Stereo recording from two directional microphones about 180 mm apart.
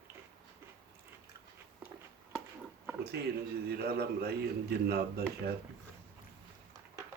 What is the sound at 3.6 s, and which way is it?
A man's voice, 60° right (ahead or behind).